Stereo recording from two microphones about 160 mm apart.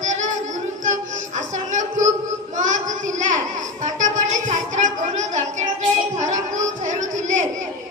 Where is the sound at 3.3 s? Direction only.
50° right (ahead or behind).